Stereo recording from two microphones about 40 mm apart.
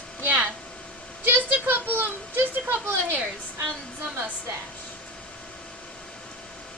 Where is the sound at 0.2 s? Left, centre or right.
Right.